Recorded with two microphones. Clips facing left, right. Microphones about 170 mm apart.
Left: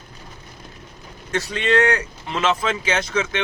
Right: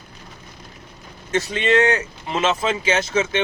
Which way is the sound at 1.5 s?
20° right (ahead or behind).